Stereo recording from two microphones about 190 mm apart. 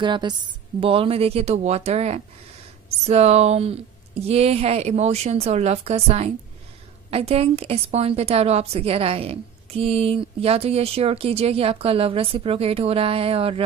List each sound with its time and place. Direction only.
0.0 s a woman's voice: 25° right (ahead or behind)